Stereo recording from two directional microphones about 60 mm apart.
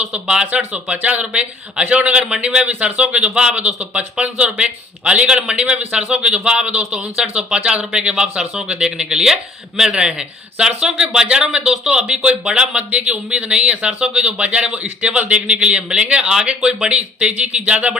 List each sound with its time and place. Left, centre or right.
0.0 s a man's voice: centre